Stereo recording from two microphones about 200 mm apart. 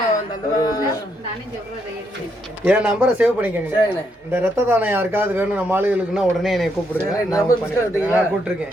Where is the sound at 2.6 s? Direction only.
10° right (ahead or behind).